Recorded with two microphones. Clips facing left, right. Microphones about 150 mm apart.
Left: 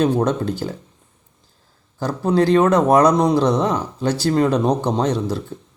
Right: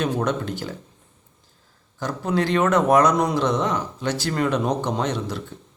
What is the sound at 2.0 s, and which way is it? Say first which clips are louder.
Speech: left 6 dB; 30° left (ahead or behind).